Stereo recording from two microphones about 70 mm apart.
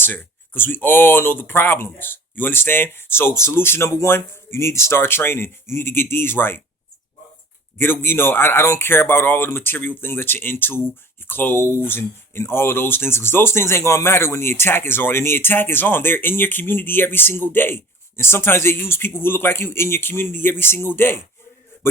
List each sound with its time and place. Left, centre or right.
0.0 s speech: left
7.8 s speech: left